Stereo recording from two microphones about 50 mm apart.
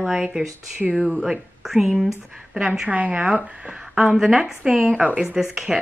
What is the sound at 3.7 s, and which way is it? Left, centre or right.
Speech, centre.